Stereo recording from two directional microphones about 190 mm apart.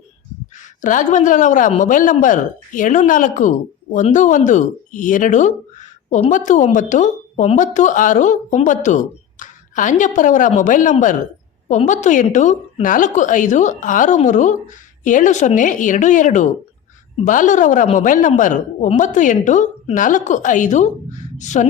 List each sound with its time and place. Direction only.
0.8 s a woman's voice: 40° left (ahead or behind)